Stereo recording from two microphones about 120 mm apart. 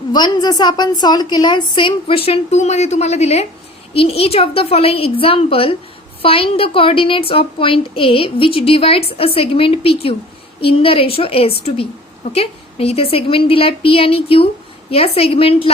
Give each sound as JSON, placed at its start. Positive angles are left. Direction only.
{"t": 0.1, "sound": "a woman's voice", "side_deg": 35}
{"t": 3.9, "sound": "a woman's voice", "side_deg": 55}